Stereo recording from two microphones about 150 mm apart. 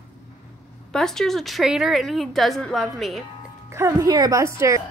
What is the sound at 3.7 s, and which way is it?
A woman's voice, 20° right (ahead or behind).